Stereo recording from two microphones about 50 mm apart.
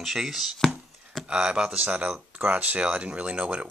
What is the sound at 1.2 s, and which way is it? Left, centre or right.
Speech, centre.